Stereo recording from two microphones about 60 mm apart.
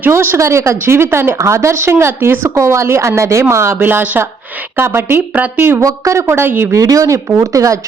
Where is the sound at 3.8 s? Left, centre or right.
Right.